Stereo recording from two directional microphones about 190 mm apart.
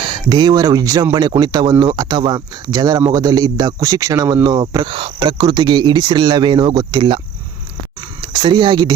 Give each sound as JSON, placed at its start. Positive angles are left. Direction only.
{"t": 0.0, "sound": "speech", "side_deg": -25}
{"t": 8.2, "sound": "speech", "side_deg": -25}